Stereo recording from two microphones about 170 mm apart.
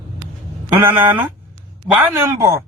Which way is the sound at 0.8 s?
10° right (ahead or behind).